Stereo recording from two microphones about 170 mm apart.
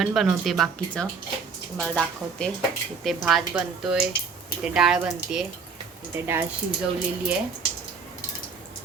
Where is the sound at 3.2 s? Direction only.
5° right (ahead or behind).